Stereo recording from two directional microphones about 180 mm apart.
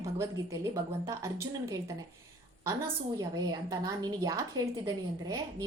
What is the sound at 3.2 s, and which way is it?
A woman's voice, 20° right (ahead or behind).